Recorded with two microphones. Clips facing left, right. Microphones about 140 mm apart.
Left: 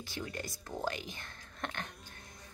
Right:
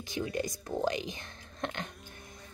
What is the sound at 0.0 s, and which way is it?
A woman's voice, 15° right (ahead or behind).